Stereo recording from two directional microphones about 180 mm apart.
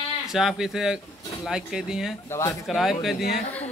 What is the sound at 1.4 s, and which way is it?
Speech, 5° right (ahead or behind).